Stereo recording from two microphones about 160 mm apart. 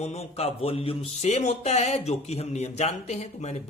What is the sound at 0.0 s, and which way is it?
Speech, 40° left (ahead or behind).